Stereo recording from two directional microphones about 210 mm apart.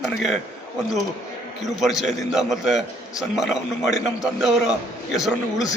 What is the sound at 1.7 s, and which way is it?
A man's voice, centre (ahead or behind).